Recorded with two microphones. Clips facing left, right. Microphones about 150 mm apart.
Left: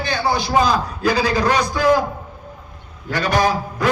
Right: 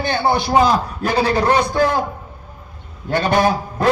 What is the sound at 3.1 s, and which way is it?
Speech, 25° right (ahead or behind).